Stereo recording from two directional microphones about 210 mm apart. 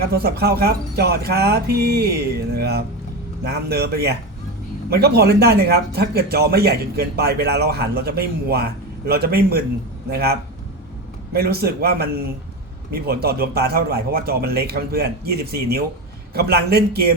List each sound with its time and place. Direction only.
0.0 s speech: 45° right (ahead or behind)
11.3 s speech: 45° right (ahead or behind)